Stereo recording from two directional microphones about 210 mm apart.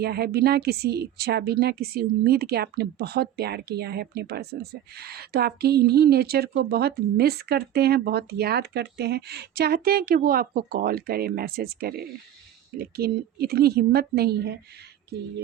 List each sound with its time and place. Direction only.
0.0 s speech: 50° right (ahead or behind)